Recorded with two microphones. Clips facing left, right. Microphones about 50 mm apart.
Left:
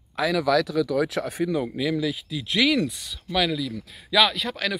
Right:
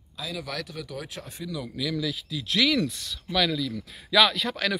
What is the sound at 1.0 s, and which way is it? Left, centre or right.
Speech, left.